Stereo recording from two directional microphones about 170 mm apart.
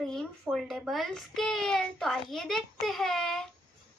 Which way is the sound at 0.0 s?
5° left (ahead or behind).